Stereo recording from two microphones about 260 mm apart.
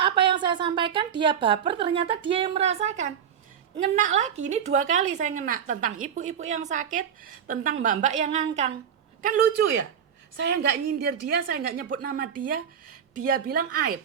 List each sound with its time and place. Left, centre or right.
0.0 s a woman's voice: centre; by 14.0 s right